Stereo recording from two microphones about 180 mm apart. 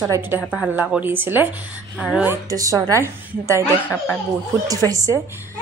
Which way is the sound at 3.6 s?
10° left (ahead or behind).